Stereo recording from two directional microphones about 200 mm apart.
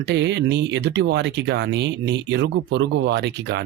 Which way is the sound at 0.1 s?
60° right (ahead or behind).